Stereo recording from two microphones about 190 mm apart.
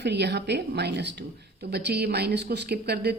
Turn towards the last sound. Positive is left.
turn(degrees=-60)  # may be behind; listen again after turning